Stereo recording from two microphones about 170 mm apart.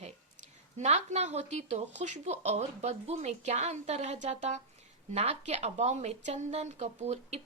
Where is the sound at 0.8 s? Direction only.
40° right (ahead or behind).